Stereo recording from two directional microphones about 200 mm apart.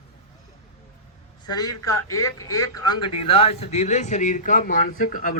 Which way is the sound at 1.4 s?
20° left (ahead or behind).